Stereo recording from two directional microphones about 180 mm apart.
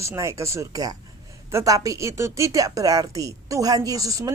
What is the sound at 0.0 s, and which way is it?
Speech, 15° right (ahead or behind).